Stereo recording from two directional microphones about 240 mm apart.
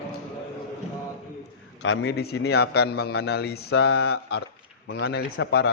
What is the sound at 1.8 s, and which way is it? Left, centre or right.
A man's voice, left.